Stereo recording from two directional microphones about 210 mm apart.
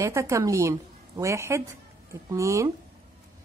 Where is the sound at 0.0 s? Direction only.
15° right (ahead or behind).